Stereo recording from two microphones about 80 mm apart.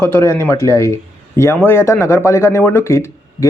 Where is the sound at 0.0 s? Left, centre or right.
Left.